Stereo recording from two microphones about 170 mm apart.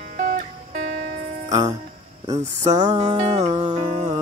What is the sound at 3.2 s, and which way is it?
Speech, 40° right (ahead or behind).